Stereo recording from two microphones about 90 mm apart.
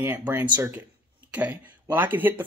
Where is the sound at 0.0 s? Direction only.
20° right (ahead or behind).